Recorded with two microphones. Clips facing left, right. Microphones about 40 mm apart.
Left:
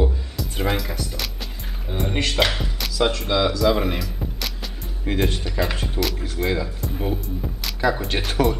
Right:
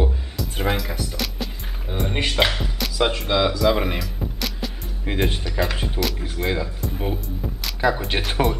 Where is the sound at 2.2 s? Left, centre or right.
Centre.